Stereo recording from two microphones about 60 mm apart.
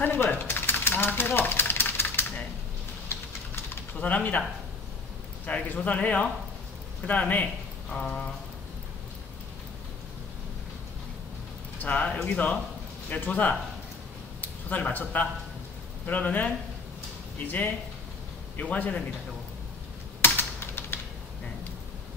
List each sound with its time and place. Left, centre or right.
0.0 s a sound: left
4.0 s speech: left
5.4 s a man's voice: left
7.9 s a sound: centre
11.8 s speech: left
20.2 s typing: left